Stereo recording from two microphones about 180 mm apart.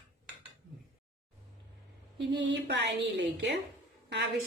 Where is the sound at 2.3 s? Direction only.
85° right.